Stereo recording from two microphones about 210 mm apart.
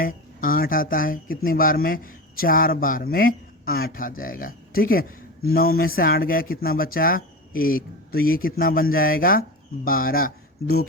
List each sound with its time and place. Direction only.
0.0 s speech: 40° left (ahead or behind)